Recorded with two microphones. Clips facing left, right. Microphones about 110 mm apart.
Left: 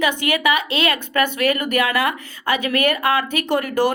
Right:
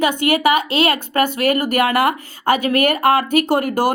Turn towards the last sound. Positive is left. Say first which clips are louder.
# right 2 dB
turn(degrees=-40)  # may be behind; listen again after turning